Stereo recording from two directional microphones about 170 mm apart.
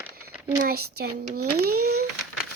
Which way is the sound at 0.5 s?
60° right (ahead or behind).